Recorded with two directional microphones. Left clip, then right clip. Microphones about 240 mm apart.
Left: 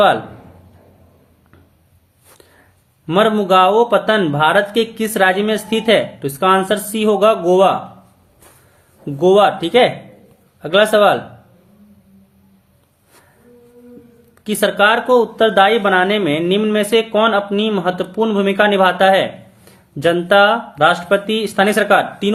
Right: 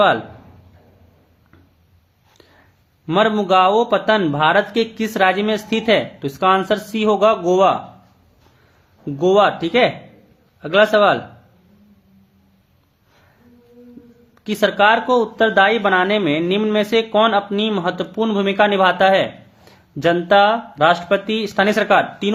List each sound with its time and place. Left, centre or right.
3.1 s speech: centre
9.0 s speech: centre
14.4 s speech: centre